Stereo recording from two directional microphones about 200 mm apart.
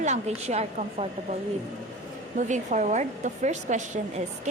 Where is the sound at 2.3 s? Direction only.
35° right (ahead or behind).